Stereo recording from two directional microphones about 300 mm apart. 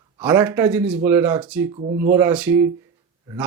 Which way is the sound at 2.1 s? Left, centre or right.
Centre.